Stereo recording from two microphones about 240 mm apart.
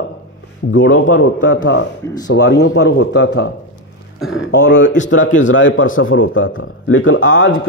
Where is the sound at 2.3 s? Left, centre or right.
Left.